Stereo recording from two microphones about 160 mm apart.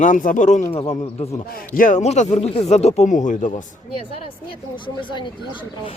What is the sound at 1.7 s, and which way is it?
Speech, 50° left (ahead or behind).